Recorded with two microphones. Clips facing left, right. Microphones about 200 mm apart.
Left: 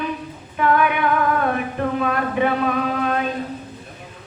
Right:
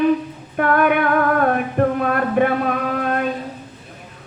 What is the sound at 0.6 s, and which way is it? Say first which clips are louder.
Female singing: right 2 dB; 50° right (ahead or behind).